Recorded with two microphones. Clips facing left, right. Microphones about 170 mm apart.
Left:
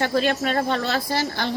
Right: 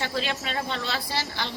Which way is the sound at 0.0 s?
50° left (ahead or behind).